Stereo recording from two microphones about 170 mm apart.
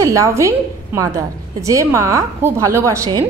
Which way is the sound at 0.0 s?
20° right (ahead or behind).